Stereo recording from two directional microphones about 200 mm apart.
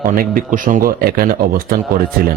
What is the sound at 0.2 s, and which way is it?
A man's voice, 45° right (ahead or behind).